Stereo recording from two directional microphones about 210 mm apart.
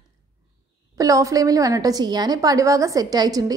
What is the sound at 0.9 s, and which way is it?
A woman's voice, 15° right (ahead or behind).